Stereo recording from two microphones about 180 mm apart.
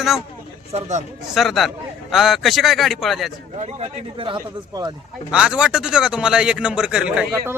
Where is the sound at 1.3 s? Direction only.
Centre (ahead or behind).